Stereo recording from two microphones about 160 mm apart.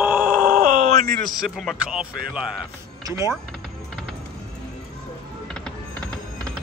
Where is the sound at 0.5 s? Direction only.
60° right (ahead or behind).